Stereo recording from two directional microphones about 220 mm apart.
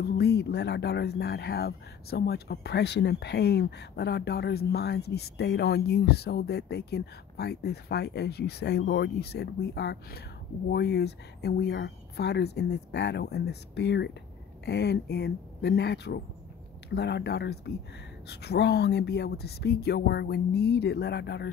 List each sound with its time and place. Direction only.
0.0 s speech: 45° left (ahead or behind)